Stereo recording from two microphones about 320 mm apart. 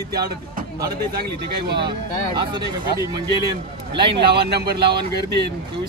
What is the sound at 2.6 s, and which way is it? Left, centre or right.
Speech, centre.